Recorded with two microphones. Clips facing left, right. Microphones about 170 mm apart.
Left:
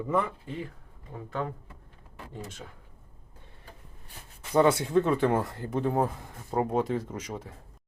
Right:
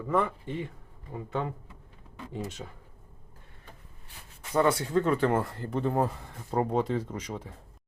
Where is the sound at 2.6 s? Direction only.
20° right (ahead or behind).